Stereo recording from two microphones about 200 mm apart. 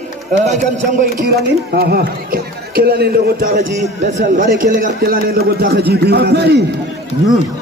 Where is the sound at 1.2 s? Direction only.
50° right (ahead or behind).